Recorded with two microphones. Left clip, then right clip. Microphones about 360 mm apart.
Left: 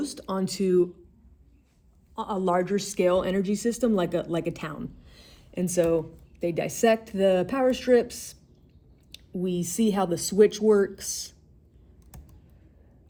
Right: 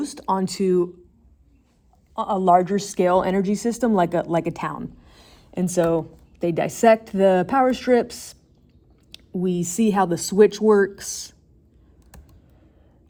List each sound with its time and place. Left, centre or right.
0.0 s a woman's voice: centre
2.1 s a woman's voice: centre
9.4 s a woman's voice: centre